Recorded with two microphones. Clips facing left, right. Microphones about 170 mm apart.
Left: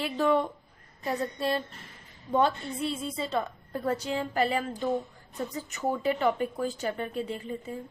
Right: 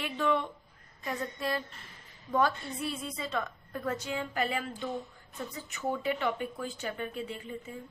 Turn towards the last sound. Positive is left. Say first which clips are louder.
# left 5 dB
turn(degrees=35)  # may be behind; listen again after turning